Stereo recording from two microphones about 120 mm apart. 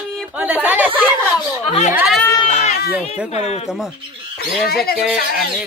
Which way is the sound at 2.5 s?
70° left (ahead or behind).